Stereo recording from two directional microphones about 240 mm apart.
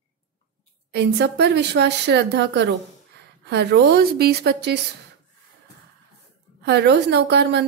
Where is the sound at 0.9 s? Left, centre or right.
Right.